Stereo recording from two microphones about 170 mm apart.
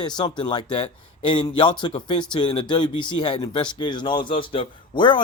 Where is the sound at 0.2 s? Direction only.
25° left (ahead or behind).